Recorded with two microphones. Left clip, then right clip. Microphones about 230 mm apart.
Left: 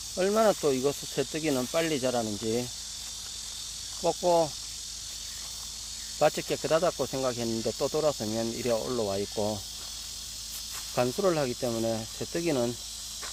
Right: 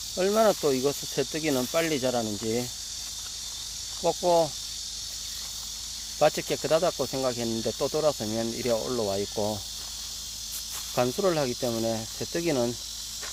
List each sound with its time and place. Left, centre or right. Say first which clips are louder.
0.2 s speech: right 2 dB; centre
4.0 s speech: right 2 dB; centre
6.1 s speech: right 2 dB; centre
10.9 s speech: right 1 dB; centre